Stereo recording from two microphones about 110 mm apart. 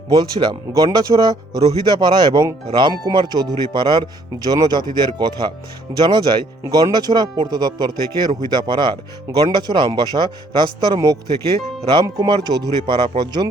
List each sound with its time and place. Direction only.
0.1 s speech: 40° right (ahead or behind)